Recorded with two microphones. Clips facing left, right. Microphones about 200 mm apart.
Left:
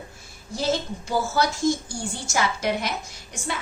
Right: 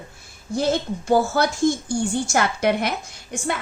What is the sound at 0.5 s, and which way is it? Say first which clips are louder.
A woman's voice: right 4 dB; 55° right (ahead or behind).